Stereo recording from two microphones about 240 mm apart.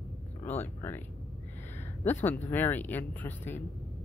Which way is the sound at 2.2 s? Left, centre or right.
Centre.